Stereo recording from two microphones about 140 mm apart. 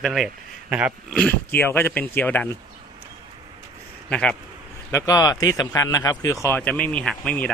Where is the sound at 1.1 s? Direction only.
10° left (ahead or behind).